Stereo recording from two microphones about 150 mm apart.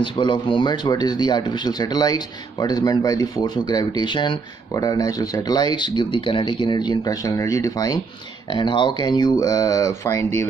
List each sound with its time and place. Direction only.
0.0 s speech: 35° left (ahead or behind)